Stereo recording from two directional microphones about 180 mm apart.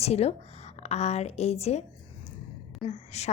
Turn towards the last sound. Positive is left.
turn(degrees=35)  # may be behind; listen again after turning